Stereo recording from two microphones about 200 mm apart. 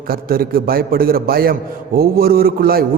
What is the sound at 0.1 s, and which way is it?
A man's voice, 50° right (ahead or behind).